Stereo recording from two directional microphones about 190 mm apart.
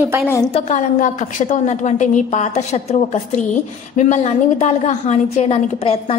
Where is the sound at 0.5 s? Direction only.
35° left (ahead or behind).